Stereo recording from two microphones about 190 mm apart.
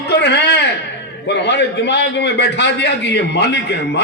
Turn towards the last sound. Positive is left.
turn(degrees=65)  # may be behind; listen again after turning